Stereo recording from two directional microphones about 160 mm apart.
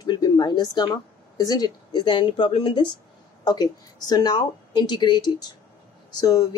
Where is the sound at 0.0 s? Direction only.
25° left (ahead or behind).